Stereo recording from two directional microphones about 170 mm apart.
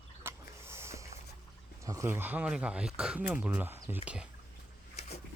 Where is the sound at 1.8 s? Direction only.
20° right (ahead or behind).